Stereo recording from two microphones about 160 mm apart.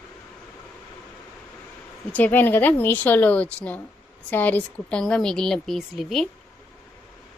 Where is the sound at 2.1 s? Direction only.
10° left (ahead or behind).